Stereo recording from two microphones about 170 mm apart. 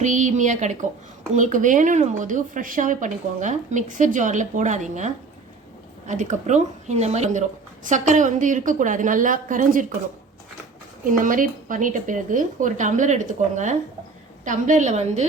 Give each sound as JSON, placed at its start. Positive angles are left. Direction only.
{"t": 0.0, "sound": "a woman's voice", "side_deg": -45}
{"t": 11.0, "sound": "a woman's voice", "side_deg": -50}